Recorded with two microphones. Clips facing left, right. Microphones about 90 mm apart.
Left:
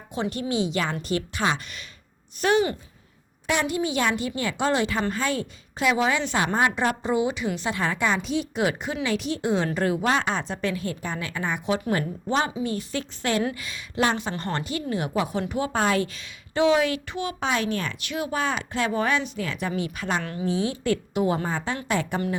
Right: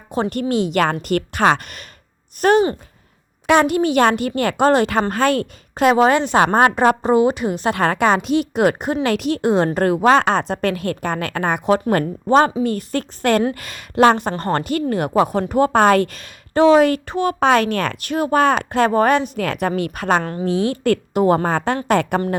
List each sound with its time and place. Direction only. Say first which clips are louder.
0.1 s a woman's voice: right 7 dB; 50° right (ahead or behind)
3.4 s a woman's voice: right 10 dB; 65° right (ahead or behind)
10.1 s a woman's voice: right 10 dB; 70° right (ahead or behind); by 17.3 s 45° right (ahead or behind)
17.4 s a woman's voice: right 10 dB; 65° right (ahead or behind)
18.0 s a woman's voice: right 13 dB; 45° right (ahead or behind)